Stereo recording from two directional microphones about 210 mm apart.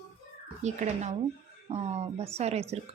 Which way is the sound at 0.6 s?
35° right (ahead or behind).